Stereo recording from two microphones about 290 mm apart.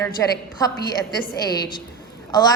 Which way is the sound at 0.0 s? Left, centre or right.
Centre.